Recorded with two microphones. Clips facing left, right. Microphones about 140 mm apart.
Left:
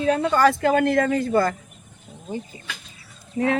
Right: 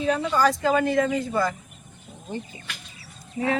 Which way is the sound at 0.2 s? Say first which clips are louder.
Left 3 dB; 65° left (ahead or behind).